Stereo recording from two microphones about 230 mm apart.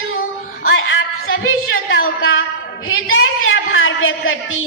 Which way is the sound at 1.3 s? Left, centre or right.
Left.